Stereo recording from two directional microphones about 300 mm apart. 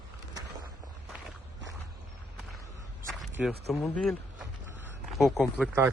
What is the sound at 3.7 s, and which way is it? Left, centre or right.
Speech, centre.